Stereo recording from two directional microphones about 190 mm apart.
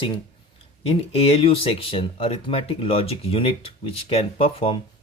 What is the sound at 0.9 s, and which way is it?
Speech, 30° left (ahead or behind).